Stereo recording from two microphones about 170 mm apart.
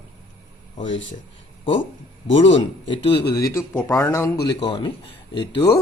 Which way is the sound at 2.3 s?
90° left.